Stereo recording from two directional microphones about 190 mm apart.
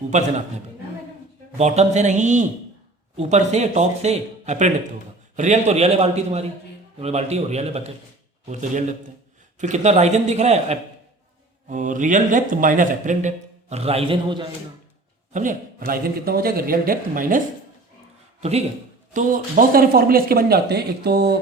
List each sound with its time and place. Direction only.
0.1 s speech: 40° right (ahead or behind)
1.5 s speech: 35° right (ahead or behind)
15.3 s speech: 40° right (ahead or behind)
18.3 s speech: 35° right (ahead or behind)
19.1 s speech: 45° right (ahead or behind)